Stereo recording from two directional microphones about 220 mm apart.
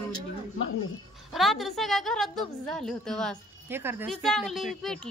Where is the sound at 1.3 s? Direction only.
Centre (ahead or behind).